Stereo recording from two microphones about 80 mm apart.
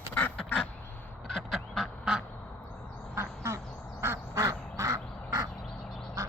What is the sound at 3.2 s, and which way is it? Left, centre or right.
Quack, right.